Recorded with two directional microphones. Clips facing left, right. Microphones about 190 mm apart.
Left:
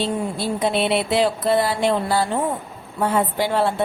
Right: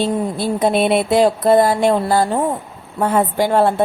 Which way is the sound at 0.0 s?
50° right (ahead or behind).